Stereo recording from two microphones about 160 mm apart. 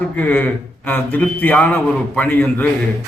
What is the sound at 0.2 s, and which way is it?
A man's voice, 10° left (ahead or behind).